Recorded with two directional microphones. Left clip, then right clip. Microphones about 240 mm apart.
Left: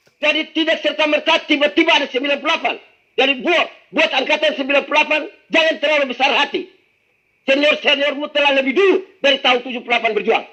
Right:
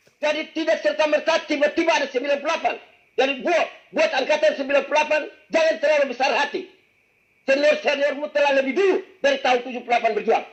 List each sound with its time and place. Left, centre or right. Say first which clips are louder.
0.2 s a man's voice: left 6 dB; left